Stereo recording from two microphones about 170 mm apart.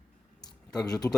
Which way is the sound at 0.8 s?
20° left (ahead or behind).